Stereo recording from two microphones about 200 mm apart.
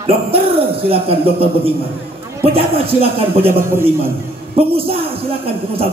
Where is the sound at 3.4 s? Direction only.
10° right (ahead or behind).